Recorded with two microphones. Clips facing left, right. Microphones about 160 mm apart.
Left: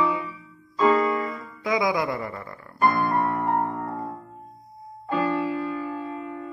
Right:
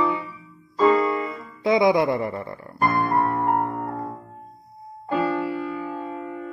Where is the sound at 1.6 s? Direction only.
25° right (ahead or behind).